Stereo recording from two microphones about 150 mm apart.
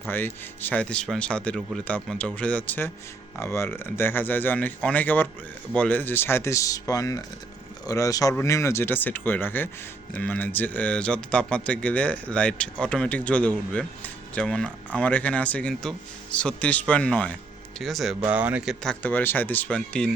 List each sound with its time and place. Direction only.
0.1 s speech: 15° left (ahead or behind)